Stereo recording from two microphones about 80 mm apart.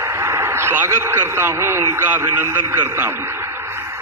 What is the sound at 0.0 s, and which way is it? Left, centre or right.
A man's voice, right.